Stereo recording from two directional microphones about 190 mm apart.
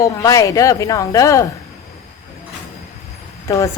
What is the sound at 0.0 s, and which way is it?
Speech, 15° left (ahead or behind).